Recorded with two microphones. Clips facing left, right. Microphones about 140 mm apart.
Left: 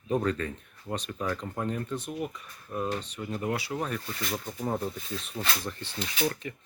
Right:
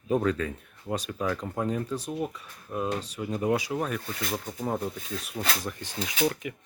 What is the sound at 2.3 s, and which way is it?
Speech, 10° right (ahead or behind).